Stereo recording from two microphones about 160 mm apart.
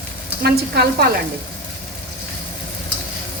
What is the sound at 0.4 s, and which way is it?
Speech, 85° right.